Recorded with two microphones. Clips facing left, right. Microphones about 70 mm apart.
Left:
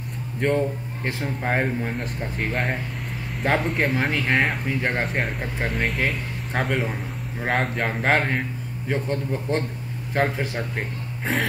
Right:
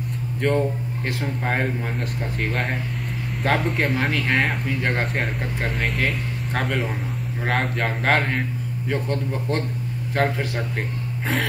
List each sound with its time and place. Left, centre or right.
0.4 s speech: centre